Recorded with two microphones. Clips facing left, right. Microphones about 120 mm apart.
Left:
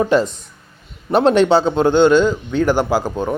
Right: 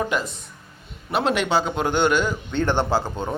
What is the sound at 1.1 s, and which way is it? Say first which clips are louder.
Speech: left 9 dB; 35° left (ahead or behind).